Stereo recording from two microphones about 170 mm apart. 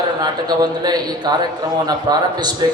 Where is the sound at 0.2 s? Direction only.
25° right (ahead or behind).